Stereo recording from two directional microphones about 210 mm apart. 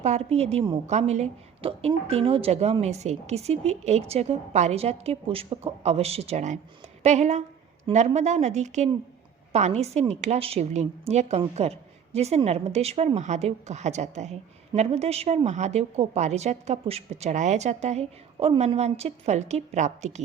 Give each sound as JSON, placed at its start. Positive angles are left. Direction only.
{"t": 0.0, "sound": "a woman's voice", "side_deg": -30}